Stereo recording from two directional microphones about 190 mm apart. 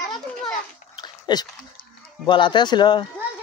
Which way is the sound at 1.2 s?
20° left (ahead or behind).